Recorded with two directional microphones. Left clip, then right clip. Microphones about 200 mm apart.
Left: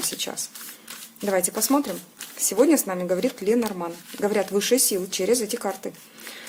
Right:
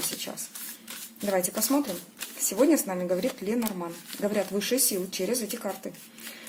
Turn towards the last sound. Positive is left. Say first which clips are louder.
# left 7 dB
turn(degrees=35)  # may be behind; listen again after turning